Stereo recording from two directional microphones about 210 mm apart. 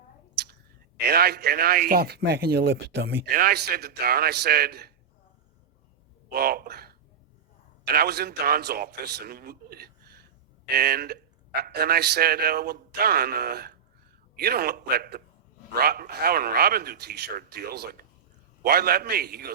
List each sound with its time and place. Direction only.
0.9 s speech: 50° right (ahead or behind)
6.2 s speech: 45° right (ahead or behind)